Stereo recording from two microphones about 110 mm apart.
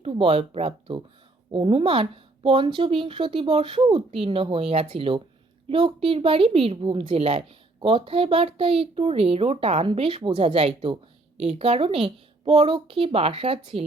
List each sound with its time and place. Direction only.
0.0 s a woman's voice: 60° right (ahead or behind)
1.5 s a woman's voice: 50° right (ahead or behind)